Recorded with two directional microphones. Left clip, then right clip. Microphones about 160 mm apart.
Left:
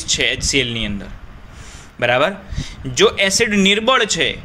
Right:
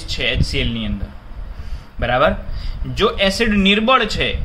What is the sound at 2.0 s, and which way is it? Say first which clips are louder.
Speech: even; 50° left (ahead or behind).